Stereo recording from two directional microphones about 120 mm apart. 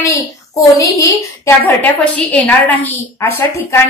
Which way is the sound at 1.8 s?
10° left (ahead or behind).